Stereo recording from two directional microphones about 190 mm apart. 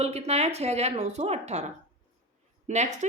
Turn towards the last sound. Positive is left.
turn(degrees=-40)  # may be behind; listen again after turning